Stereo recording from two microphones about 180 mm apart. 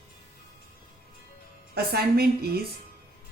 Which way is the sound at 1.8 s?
55° right (ahead or behind).